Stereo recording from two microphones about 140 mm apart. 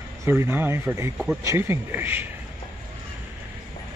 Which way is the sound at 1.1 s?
5° right (ahead or behind).